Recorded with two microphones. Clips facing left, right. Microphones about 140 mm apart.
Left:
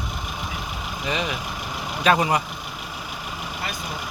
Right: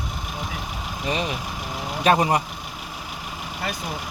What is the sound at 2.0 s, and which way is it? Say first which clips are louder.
Speech: right 1 dB; 35° right (ahead or behind).